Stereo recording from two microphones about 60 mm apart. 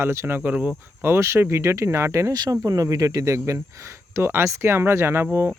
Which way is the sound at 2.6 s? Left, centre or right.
Right.